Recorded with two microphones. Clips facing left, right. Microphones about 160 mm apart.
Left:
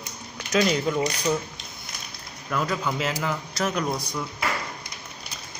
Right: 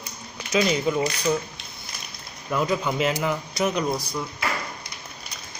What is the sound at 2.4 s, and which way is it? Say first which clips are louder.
Speech: right 3 dB; 10° right (ahead or behind).